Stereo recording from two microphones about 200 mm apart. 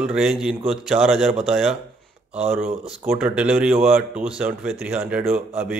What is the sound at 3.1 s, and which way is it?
Speech, 5° right (ahead or behind).